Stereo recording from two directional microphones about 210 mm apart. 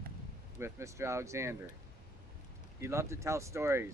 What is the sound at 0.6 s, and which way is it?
Speech, 15° right (ahead or behind).